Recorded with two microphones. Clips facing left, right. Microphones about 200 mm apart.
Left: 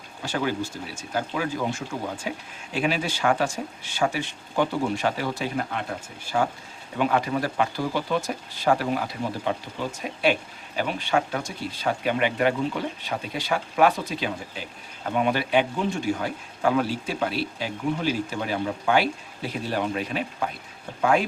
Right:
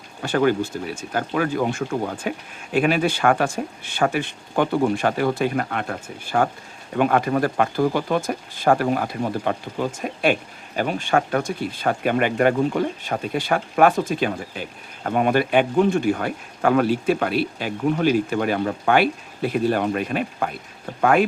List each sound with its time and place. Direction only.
0.2 s speech: 55° right (ahead or behind)